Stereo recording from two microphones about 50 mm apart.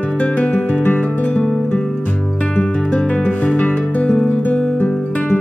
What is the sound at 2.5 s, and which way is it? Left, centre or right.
Music, left.